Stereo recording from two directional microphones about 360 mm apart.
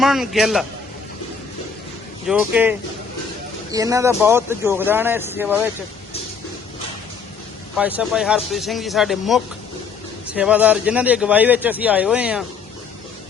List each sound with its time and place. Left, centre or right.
0.0 s a man's voice: centre
2.2 s a man's voice: centre
7.8 s a man's voice: centre